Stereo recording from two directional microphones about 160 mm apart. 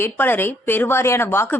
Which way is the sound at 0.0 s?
15° left (ahead or behind).